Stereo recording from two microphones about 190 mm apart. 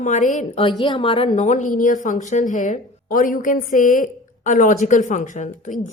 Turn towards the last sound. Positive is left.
turn(degrees=40)  # may be behind; listen again after turning